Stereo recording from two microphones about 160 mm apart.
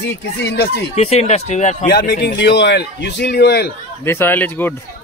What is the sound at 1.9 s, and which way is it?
A man's voice, 90° left.